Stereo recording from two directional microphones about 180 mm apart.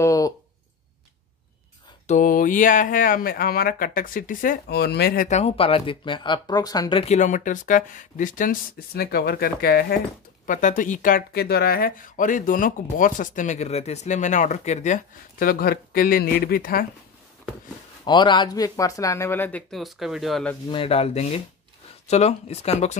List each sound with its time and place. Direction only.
0.0 s a sound: 20° left (ahead or behind)
2.0 s speech: 45° left (ahead or behind)
5.4 s speech: 30° left (ahead or behind)
7.2 s speech: 45° left (ahead or behind)
18.0 s speech: 25° left (ahead or behind)
19.7 s speech: centre (ahead or behind)
20.6 s speech: 30° left (ahead or behind)